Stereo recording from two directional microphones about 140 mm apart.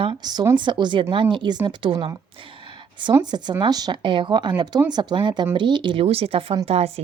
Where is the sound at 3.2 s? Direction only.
30° right (ahead or behind).